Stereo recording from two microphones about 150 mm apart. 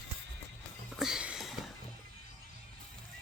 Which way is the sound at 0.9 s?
5° right (ahead or behind).